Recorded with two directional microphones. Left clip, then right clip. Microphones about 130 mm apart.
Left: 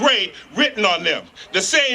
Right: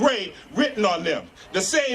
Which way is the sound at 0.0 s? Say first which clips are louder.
Left 5 dB; 15° left (ahead or behind).